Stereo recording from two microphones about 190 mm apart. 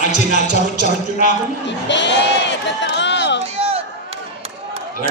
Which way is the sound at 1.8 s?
65° left (ahead or behind).